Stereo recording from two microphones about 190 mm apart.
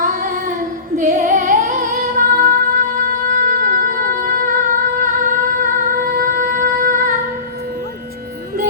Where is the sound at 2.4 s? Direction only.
45° right (ahead or behind).